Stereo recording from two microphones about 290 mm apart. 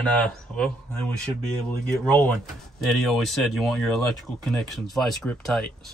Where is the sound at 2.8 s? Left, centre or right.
Centre.